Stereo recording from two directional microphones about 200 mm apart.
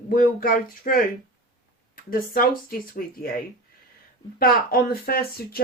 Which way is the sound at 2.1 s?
45° left (ahead or behind).